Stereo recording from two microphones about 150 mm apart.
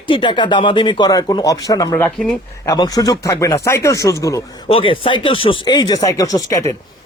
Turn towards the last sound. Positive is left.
turn(degrees=20)  # may be behind; listen again after turning